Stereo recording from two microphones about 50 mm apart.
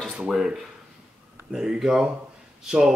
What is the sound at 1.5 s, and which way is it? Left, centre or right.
Speech, centre.